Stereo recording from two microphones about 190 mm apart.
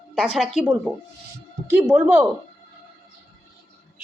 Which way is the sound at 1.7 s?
5° right (ahead or behind).